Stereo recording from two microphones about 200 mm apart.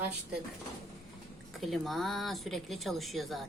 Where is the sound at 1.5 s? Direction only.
Centre (ahead or behind).